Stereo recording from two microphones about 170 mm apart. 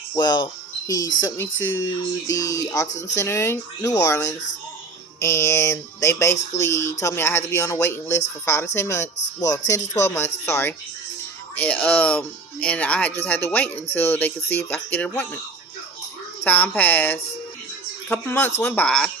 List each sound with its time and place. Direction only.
0.1 s speech: 25° left (ahead or behind)
16.4 s speech: 10° left (ahead or behind)